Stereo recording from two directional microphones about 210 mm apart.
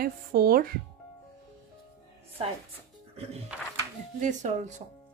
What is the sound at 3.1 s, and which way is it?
Music, 30° right (ahead or behind).